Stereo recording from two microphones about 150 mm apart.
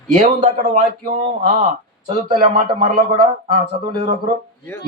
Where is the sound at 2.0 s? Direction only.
50° right (ahead or behind).